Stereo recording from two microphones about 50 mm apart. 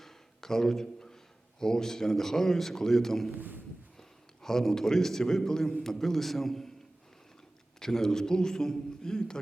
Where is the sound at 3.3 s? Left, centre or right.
Right.